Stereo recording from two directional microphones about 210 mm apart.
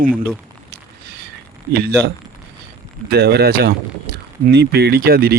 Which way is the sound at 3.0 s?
50° right (ahead or behind).